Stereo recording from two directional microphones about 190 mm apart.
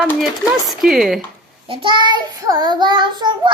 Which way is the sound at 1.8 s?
25° right (ahead or behind).